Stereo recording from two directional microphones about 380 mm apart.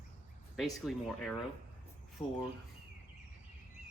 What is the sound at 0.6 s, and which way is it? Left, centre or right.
Speech, centre.